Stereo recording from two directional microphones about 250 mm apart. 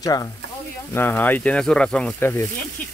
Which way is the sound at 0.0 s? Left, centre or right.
Centre.